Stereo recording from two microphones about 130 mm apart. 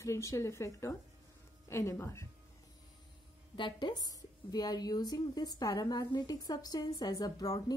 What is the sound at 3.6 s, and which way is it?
A woman's voice, 35° left (ahead or behind).